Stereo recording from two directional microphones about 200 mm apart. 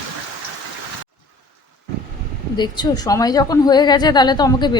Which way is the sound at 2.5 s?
20° left (ahead or behind).